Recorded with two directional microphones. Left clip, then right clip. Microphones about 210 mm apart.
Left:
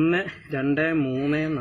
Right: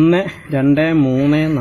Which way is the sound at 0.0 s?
40° right (ahead or behind).